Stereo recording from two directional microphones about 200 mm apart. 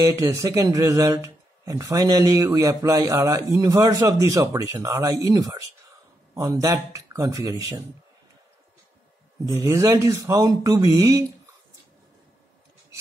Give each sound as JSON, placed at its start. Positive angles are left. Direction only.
{"t": 0.0, "sound": "speech", "side_deg": -15}
{"t": 9.5, "sound": "speech", "side_deg": -15}